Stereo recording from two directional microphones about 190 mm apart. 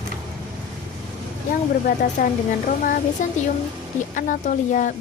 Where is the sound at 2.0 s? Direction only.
45° left (ahead or behind).